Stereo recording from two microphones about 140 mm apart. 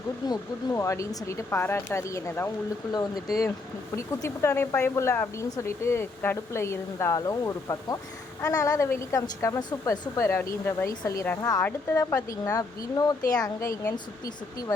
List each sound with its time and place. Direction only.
0.3 s speech: 20° left (ahead or behind)